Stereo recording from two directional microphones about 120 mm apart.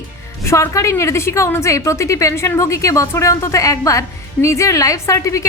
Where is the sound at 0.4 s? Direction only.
25° left (ahead or behind).